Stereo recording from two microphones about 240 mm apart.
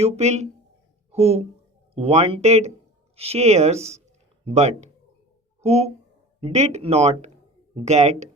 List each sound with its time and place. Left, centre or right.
0.0 s speech: right